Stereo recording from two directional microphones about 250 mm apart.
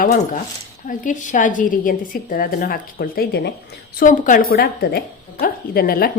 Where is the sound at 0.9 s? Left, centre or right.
Left.